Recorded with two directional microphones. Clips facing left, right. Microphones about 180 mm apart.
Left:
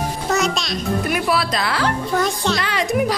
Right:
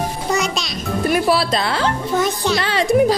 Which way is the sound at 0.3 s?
Centre (ahead or behind).